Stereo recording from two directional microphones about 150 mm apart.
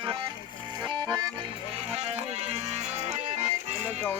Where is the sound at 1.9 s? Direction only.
45° right (ahead or behind).